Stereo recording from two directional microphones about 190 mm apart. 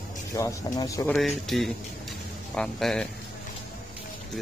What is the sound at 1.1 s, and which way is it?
Speech, centre (ahead or behind).